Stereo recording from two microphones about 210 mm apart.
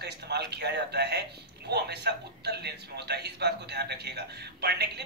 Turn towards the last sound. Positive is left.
turn(degrees=-50)  # may be behind; listen again after turning